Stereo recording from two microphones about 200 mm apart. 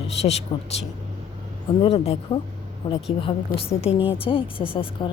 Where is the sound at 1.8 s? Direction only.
30° left (ahead or behind).